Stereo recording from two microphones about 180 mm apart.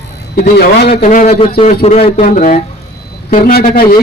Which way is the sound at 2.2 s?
50° left (ahead or behind).